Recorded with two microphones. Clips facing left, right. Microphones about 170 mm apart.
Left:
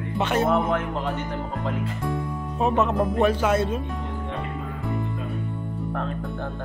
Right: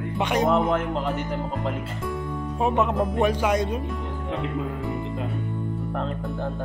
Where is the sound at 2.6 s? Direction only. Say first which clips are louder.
Left 1 dB; 10° right (ahead or behind).